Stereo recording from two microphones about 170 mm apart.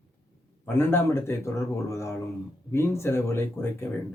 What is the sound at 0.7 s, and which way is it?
Speech, 15° left (ahead or behind).